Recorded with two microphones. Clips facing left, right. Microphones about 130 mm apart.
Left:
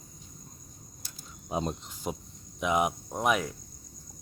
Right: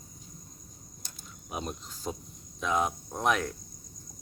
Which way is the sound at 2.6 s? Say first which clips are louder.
Left 2 dB; 15° left (ahead or behind).